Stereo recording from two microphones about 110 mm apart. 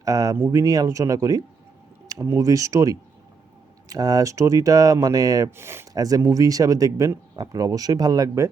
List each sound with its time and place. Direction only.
0.0 s speech: 35° right (ahead or behind)
5.5 s speech: 20° right (ahead or behind)
5.9 s speech: 35° right (ahead or behind)